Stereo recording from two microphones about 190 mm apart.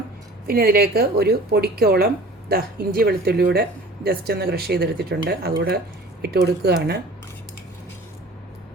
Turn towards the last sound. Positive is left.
turn(degrees=-60)  # may be behind; listen again after turning